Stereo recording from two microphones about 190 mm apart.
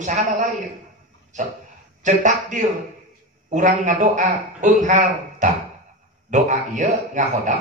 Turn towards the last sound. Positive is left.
turn(degrees=-40)  # may be behind; listen again after turning